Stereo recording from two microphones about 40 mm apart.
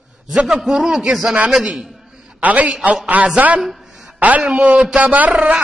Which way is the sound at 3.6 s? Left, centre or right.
Centre.